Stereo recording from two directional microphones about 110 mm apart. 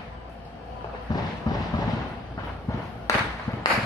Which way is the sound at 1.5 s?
35° left (ahead or behind).